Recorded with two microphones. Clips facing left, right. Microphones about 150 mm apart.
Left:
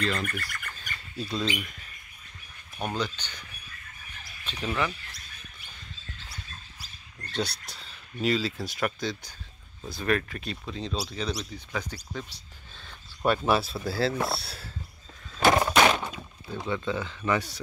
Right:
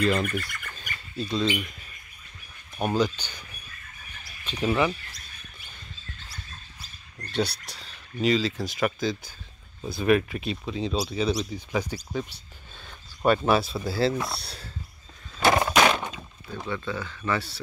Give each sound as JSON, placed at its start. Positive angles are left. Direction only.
{"t": 0.0, "sound": "speech", "side_deg": -10}
{"t": 0.3, "sound": "speech", "side_deg": 0}
{"t": 2.8, "sound": "speech", "side_deg": -10}
{"t": 4.5, "sound": "speech", "side_deg": -15}
{"t": 7.7, "sound": "speech", "side_deg": 0}
{"t": 15.5, "sound": "thunk", "side_deg": -10}
{"t": 16.0, "sound": "thunk", "side_deg": 5}
{"t": 16.6, "sound": "speech", "side_deg": 20}